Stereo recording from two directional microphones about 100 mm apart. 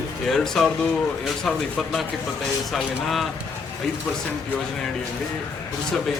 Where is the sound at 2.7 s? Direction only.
Centre (ahead or behind).